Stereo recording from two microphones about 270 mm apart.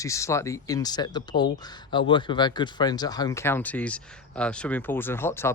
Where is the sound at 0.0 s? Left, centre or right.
Centre.